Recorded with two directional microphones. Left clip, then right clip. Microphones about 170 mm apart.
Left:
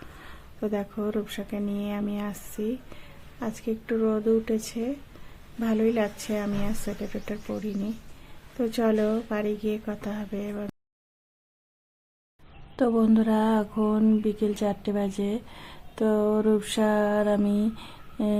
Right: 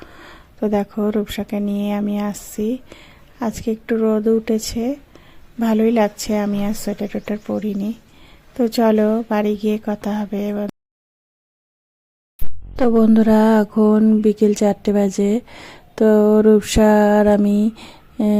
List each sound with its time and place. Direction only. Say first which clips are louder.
0.0 s speech: right 6 dB; 35° right (ahead or behind)
12.7 s a woman's voice: right 8 dB; 35° right (ahead or behind)